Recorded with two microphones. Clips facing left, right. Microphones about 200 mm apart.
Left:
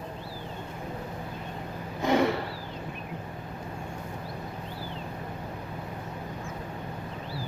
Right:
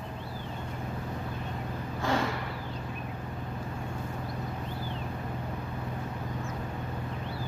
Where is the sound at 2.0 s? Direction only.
20° left (ahead or behind).